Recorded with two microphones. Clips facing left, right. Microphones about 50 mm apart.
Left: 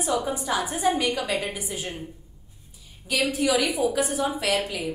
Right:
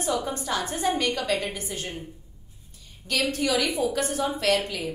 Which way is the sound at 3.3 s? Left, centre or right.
Centre.